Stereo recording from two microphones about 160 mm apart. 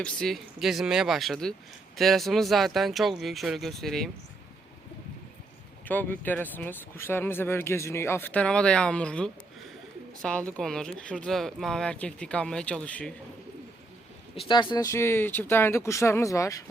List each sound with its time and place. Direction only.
0.0 s speech: 5° left (ahead or behind)
5.8 s speech: 10° left (ahead or behind)
14.3 s speech: 30° left (ahead or behind)